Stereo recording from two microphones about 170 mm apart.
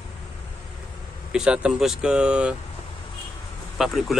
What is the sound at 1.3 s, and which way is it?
Speech, 5° right (ahead or behind).